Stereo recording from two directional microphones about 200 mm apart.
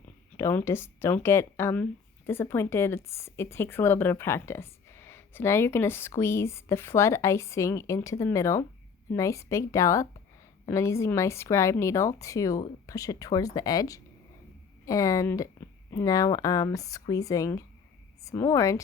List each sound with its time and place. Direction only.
0.3 s a woman's voice: 15° left (ahead or behind)